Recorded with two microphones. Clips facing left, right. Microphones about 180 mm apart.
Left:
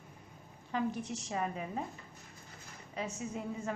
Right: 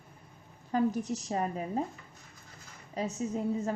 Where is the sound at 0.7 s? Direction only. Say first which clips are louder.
Right 6 dB; 40° right (ahead or behind).